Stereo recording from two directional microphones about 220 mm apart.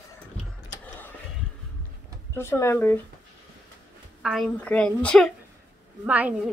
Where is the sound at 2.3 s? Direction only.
10° left (ahead or behind).